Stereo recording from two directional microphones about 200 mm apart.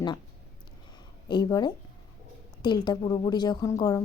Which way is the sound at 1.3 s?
20° left (ahead or behind).